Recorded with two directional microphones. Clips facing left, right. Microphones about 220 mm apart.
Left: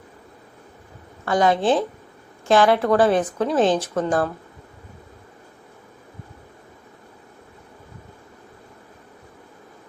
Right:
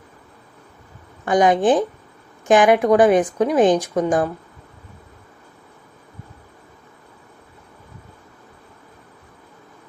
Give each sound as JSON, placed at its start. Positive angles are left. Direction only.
{"t": 1.2, "sound": "speech", "side_deg": -15}